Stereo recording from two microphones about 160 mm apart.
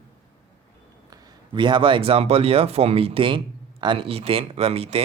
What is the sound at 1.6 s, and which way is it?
Speech, 30° right (ahead or behind).